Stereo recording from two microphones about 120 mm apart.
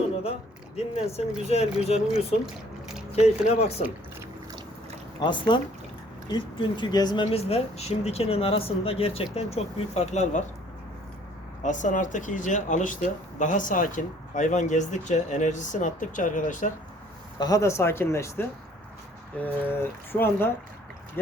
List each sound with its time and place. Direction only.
0.9 s speech: 60° left (ahead or behind)
5.2 s speech: 40° left (ahead or behind)
7.3 s speech: 55° left (ahead or behind)
11.6 s speech: 90° left
17.4 s speech: 25° left (ahead or behind)